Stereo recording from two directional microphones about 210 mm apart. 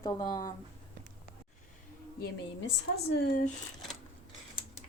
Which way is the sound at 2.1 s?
50° left (ahead or behind).